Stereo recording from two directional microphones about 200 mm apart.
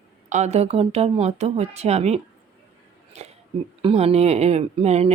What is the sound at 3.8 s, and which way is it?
Speech, 30° right (ahead or behind).